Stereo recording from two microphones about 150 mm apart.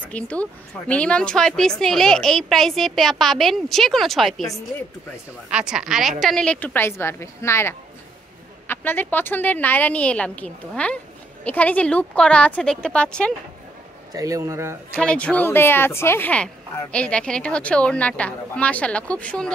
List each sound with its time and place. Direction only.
0.0 s speech: 10° left (ahead or behind)
5.5 s speech: 5° right (ahead or behind)
14.1 s a man's voice: 20° right (ahead or behind)
15.0 s speech: 5° left (ahead or behind)